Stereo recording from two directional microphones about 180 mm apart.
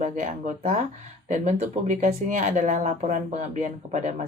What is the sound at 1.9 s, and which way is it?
A woman's voice, 45° right (ahead or behind).